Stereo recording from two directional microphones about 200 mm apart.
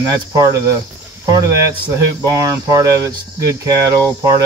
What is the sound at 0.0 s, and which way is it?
Speech, 20° right (ahead or behind).